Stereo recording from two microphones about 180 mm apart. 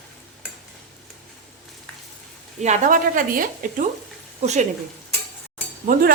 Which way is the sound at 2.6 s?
45° right (ahead or behind).